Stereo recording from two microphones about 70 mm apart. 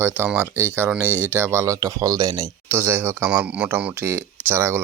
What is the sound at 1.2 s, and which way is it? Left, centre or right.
Speech, right.